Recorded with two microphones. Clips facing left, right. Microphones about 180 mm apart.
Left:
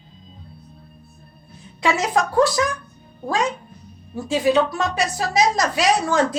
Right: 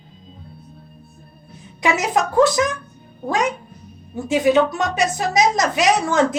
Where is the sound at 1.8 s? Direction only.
20° right (ahead or behind).